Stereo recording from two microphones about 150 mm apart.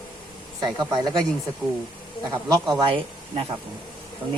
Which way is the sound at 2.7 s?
35° right (ahead or behind).